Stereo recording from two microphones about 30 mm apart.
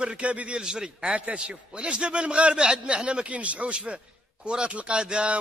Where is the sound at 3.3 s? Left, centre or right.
Right.